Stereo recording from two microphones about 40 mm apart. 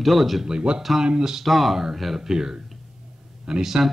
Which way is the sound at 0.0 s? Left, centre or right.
Centre.